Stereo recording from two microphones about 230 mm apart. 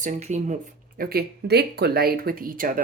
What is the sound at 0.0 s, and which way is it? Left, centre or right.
Speech, right.